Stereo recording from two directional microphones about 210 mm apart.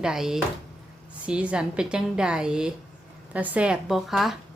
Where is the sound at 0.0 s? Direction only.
Centre (ahead or behind).